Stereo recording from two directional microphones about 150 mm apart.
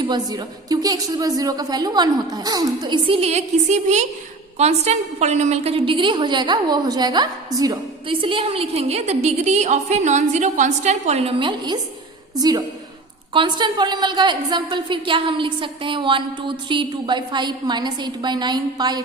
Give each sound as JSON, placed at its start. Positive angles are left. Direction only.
{"t": 0.1, "sound": "a woman's voice", "side_deg": -25}
{"t": 8.0, "sound": "a woman's voice", "side_deg": -35}